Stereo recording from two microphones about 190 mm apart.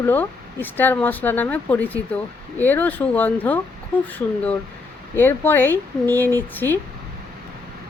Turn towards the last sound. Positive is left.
turn(degrees=10)  # may be behind; listen again after turning